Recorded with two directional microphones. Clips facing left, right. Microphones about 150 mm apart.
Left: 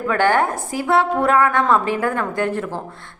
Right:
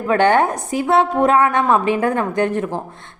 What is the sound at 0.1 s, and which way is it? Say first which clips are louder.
A woman's voice: right 3 dB; 20° right (ahead or behind).